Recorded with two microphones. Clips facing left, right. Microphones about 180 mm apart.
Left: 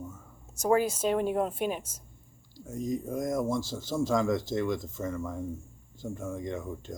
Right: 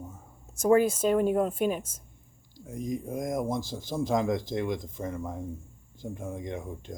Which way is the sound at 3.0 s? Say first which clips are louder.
Left 1 dB; 20° right (ahead or behind).